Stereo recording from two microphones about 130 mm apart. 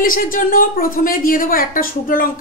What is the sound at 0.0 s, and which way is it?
A woman's voice, 90° left.